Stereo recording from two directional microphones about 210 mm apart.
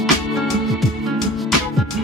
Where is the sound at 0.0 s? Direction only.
Centre (ahead or behind).